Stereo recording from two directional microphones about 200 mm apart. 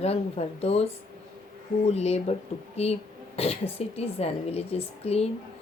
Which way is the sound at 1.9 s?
30° left (ahead or behind).